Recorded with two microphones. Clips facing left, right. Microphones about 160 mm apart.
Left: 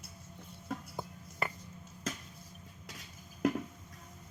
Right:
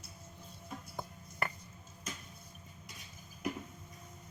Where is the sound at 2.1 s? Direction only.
90° left.